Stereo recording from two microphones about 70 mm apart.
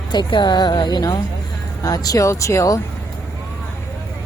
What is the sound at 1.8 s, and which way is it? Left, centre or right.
Speech, left.